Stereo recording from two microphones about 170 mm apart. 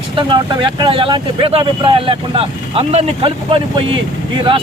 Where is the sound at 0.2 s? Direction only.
30° right (ahead or behind).